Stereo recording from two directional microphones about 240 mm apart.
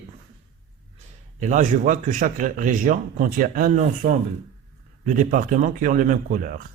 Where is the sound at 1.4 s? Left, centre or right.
Right.